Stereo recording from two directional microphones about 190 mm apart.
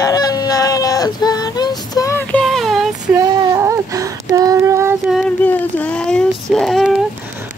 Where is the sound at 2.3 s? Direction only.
Centre (ahead or behind).